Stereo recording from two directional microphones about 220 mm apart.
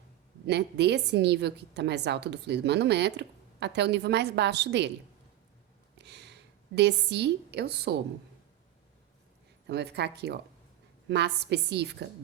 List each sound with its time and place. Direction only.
0.4 s a woman's voice: 50° right (ahead or behind)
6.0 s a woman's voice: 50° right (ahead or behind)
9.6 s a woman's voice: 50° right (ahead or behind)